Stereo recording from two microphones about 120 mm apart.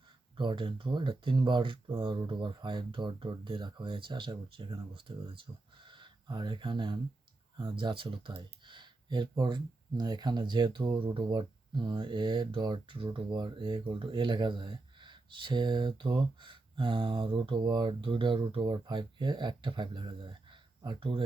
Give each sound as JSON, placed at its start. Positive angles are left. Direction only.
{"t": 0.3, "sound": "speech", "side_deg": -45}